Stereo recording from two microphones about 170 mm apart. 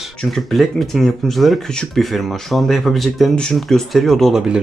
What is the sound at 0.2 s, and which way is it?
Speech, centre (ahead or behind).